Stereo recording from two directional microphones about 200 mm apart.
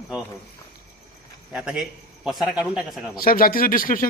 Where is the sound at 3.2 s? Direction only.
45° left (ahead or behind).